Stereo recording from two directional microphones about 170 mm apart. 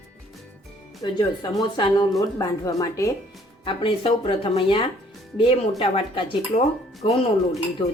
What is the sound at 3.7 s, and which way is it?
Speech, 30° left (ahead or behind).